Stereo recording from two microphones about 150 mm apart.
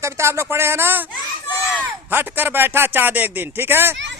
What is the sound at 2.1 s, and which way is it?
Speech, 15° right (ahead or behind).